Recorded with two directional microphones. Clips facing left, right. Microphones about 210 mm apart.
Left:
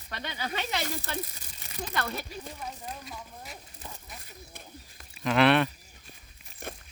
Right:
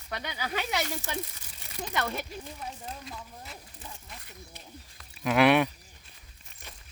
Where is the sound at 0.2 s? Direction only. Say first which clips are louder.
Left 1 dB; 10° right (ahead or behind).